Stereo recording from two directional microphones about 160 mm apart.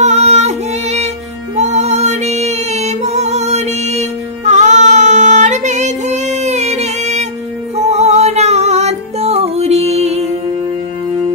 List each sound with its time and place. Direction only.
0.0 s music: 45° right (ahead or behind)